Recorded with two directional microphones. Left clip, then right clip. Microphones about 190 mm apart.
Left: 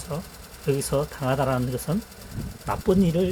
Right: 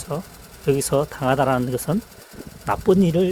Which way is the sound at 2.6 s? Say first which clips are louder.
Right 5 dB; 55° right (ahead or behind).